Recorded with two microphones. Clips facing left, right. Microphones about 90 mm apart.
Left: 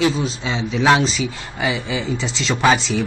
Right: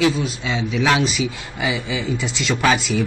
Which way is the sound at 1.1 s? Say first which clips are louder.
Even; 5° right (ahead or behind).